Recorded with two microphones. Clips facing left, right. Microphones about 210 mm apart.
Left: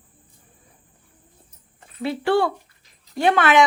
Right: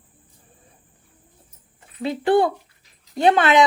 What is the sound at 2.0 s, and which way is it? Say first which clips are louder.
Speech: right 2 dB; 20° right (ahead or behind).